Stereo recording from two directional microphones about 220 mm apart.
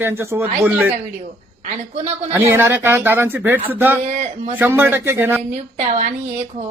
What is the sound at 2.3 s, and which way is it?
Speech, 10° right (ahead or behind).